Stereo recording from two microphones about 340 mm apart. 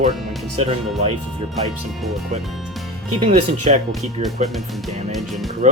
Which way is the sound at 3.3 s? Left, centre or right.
Centre.